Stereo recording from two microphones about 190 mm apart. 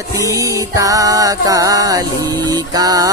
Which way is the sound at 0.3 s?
15° right (ahead or behind).